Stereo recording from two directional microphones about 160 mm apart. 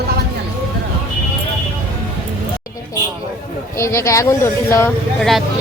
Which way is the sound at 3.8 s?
15° left (ahead or behind).